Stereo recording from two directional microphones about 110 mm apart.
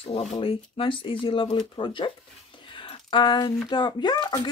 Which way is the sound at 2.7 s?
50° left (ahead or behind).